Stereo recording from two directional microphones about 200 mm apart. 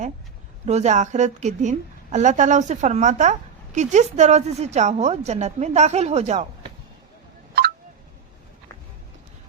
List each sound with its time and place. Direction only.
0.6 s a woman's voice: 35° right (ahead or behind)